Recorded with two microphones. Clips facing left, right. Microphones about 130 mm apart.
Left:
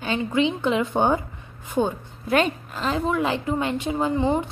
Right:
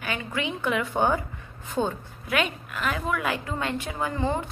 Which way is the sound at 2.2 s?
35° left (ahead or behind).